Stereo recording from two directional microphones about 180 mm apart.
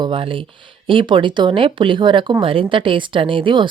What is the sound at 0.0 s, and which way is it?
Speech, 30° right (ahead or behind).